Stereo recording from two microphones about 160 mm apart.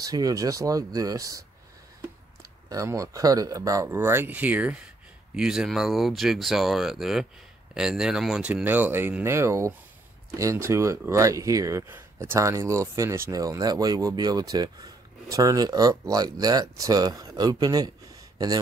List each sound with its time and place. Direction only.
0.0 s speech: 20° right (ahead or behind)
2.7 s speech: 20° right (ahead or behind)